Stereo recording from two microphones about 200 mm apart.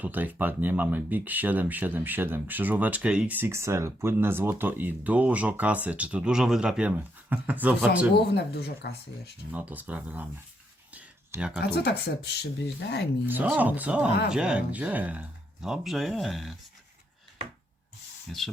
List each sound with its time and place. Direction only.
0.0 s speech: 10° right (ahead or behind)
8.1 s speech: 55° left (ahead or behind)
9.5 s speech: 10° right (ahead or behind)
10.9 s a sound: 5° right (ahead or behind)
11.6 s speech: 55° left (ahead or behind)
13.2 s speech: 10° right (ahead or behind)
18.3 s speech: centre (ahead or behind)